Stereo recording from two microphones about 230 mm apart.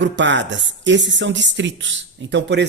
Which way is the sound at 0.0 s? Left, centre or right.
Right.